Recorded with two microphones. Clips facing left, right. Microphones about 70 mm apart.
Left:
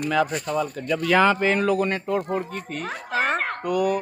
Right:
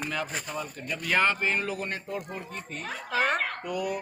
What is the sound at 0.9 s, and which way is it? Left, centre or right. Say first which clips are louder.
Speech: left 7 dB; left.